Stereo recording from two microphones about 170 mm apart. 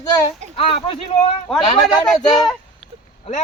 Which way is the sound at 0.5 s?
35° left (ahead or behind).